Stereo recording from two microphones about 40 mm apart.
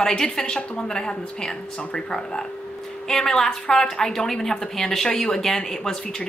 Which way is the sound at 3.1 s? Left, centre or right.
Centre.